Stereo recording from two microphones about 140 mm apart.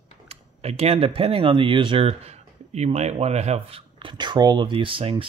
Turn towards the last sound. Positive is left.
turn(degrees=-40)  # may be behind; listen again after turning